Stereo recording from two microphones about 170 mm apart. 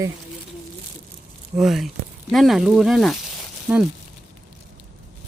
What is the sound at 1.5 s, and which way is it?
Speech, centre (ahead or behind).